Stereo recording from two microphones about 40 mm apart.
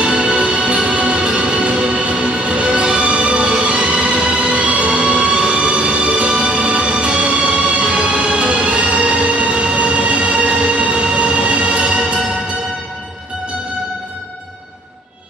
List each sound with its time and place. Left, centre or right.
0.0 s music: right